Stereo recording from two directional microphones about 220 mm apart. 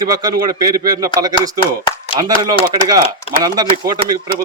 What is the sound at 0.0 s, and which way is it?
Speech, 20° right (ahead or behind).